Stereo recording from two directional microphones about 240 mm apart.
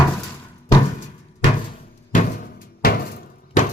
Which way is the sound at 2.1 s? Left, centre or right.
Left.